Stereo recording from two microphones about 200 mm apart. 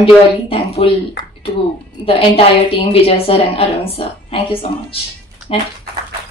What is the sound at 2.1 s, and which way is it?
A woman's voice, 30° left (ahead or behind).